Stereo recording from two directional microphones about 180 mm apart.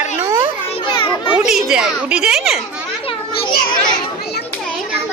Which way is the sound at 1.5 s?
Centre (ahead or behind).